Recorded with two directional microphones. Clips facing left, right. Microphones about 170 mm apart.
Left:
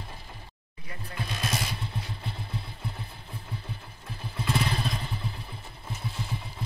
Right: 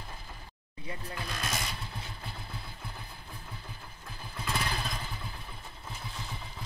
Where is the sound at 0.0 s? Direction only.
25° left (ahead or behind).